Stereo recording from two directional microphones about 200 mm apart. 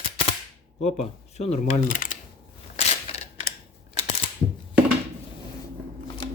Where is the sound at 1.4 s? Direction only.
40° left (ahead or behind).